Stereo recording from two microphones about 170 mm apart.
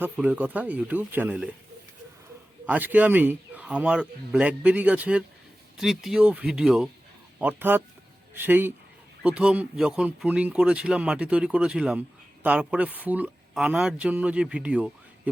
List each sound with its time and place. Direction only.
0.0 s speech: 10° right (ahead or behind)
2.6 s speech: 10° right (ahead or behind)